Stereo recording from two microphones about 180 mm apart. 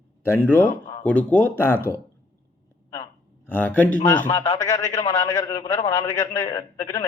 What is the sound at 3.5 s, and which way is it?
A man's voice, 10° left (ahead or behind).